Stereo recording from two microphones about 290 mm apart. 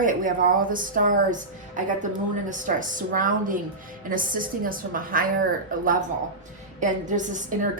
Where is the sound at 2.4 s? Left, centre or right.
Right.